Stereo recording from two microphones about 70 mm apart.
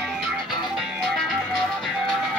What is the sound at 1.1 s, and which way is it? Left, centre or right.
Music, centre.